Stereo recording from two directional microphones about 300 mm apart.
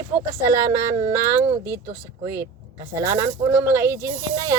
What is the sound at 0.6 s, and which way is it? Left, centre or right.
Speech, centre.